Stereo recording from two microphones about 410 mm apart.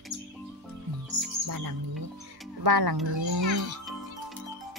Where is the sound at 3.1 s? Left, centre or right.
Right.